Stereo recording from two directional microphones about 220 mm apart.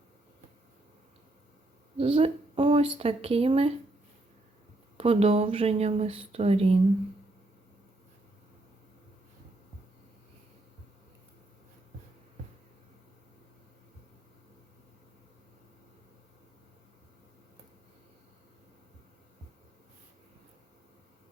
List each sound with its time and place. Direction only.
2.0 s speech: 25° right (ahead or behind)
4.9 s speech: 30° right (ahead or behind)